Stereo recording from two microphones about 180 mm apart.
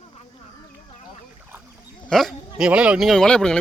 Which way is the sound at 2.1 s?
Centre (ahead or behind).